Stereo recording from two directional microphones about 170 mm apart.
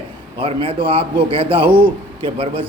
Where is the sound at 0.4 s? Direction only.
35° right (ahead or behind).